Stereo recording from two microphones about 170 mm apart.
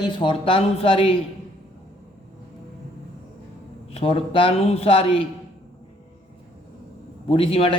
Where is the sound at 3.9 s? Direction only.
35° left (ahead or behind).